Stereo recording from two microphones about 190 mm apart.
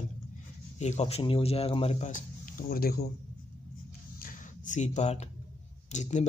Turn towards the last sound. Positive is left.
turn(degrees=40)  # may be behind; listen again after turning